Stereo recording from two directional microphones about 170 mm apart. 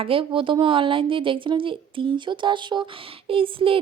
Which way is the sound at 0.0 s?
30° right (ahead or behind).